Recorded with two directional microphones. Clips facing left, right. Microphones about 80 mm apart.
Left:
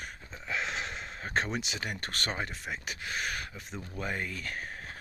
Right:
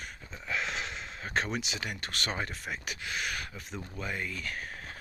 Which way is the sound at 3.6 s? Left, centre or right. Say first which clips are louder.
Even; centre.